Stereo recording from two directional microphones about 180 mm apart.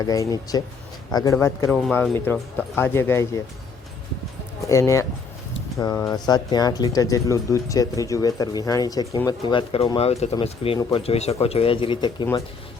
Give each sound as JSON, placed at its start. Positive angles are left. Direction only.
{"t": 0.0, "sound": "speech", "side_deg": 20}
{"t": 4.6, "sound": "speech", "side_deg": 15}